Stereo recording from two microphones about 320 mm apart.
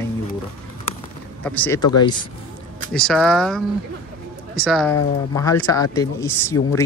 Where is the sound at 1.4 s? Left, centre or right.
Centre.